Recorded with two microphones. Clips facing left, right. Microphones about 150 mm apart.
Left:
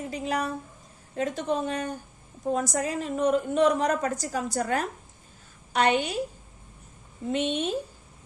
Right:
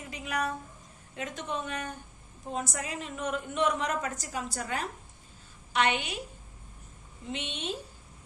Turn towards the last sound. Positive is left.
turn(degrees=45)  # may be behind; listen again after turning